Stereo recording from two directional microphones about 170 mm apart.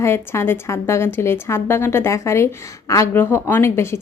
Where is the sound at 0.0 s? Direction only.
15° left (ahead or behind).